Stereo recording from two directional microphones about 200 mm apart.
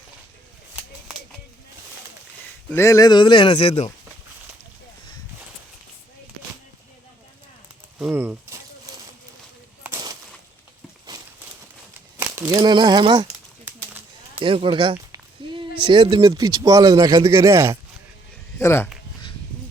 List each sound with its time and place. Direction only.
2.6 s speech: 15° left (ahead or behind); by 3.9 s 30° left (ahead or behind)
7.9 s speech: 10° right (ahead or behind)
9.8 s a sound: 15° right (ahead or behind)
12.1 s speech: 15° right (ahead or behind)
13.2 s a sound: 10° right (ahead or behind)
14.4 s speech: 25° right (ahead or behind)
18.6 s speech: 15° left (ahead or behind)